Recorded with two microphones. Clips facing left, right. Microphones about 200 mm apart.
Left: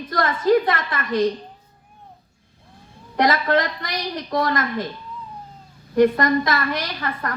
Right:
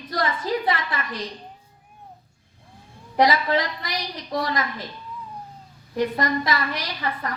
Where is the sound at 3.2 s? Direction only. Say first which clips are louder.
Left 1 dB; 55° left (ahead or behind).